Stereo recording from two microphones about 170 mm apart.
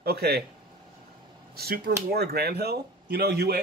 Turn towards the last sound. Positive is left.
turn(degrees=-70)  # may be behind; listen again after turning